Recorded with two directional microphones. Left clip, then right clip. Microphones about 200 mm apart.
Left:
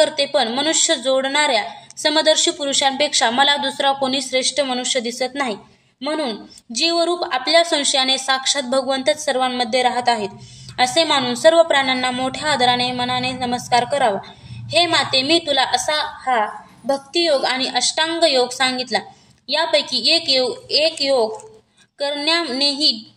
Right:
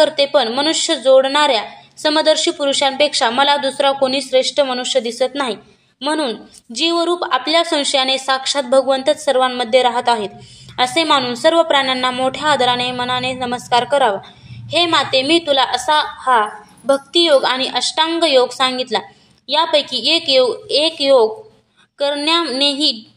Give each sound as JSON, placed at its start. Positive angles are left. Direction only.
{"t": 0.0, "sound": "a woman's voice", "side_deg": -5}